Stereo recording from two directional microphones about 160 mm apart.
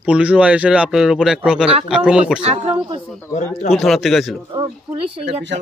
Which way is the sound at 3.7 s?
Centre (ahead or behind).